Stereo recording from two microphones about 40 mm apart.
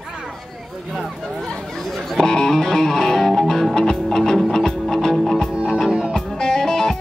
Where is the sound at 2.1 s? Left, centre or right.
Centre.